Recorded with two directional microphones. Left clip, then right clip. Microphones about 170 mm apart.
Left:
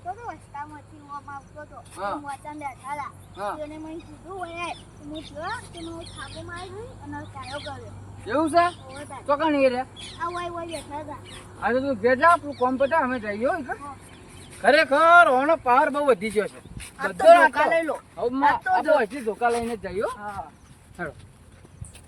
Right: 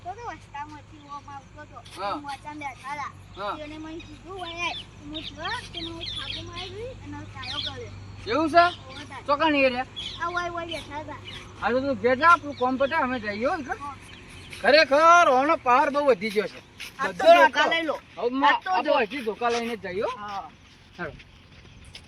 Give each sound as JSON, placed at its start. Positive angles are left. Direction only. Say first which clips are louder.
{"t": 0.3, "sound": "a sound", "louder": "left 1 dB", "side_deg": 0}
{"t": 2.0, "sound": "speech", "louder": "left 1 dB", "side_deg": 0}
{"t": 7.2, "sound": "speech", "louder": "right 3 dB", "side_deg": -5}
{"t": 10.2, "sound": "speech", "louder": "right 1 dB", "side_deg": 15}
{"t": 11.6, "sound": "speech", "louder": "left 1 dB", "side_deg": -5}
{"t": 17.5, "sound": "speech", "louder": "left 1 dB", "side_deg": 10}